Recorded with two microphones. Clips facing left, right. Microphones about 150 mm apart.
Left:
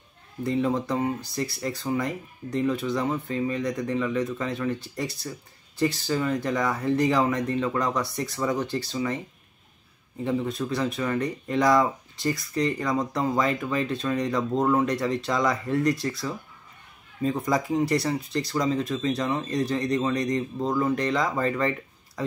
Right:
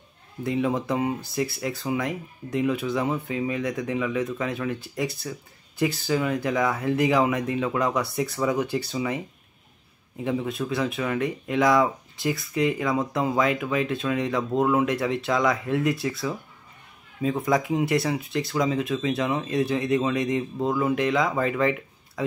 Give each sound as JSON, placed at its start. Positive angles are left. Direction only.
{"t": 0.4, "sound": "speech", "side_deg": -5}